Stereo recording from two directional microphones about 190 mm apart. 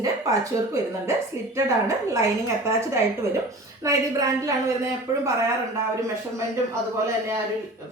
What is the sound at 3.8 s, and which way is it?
Speech, 15° right (ahead or behind).